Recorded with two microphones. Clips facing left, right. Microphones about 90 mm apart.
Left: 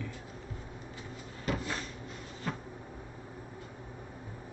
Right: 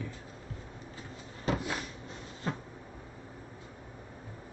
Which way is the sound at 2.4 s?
30° right (ahead or behind).